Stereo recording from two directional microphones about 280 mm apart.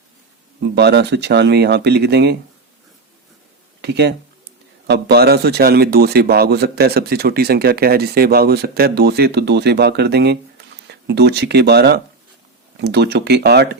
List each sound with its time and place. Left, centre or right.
0.8 s a man's voice: right
3.8 s a man's voice: right